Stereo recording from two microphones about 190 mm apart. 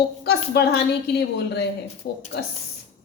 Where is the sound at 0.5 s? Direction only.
60° left (ahead or behind).